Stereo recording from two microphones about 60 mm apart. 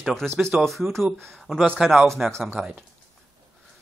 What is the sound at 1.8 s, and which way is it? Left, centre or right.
Speech, centre.